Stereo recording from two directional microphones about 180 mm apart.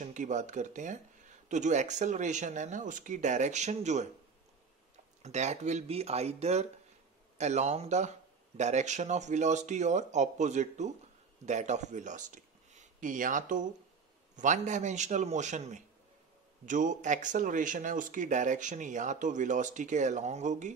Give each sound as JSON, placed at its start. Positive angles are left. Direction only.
{"t": 0.0, "sound": "speech", "side_deg": -45}
{"t": 5.2, "sound": "speech", "side_deg": -40}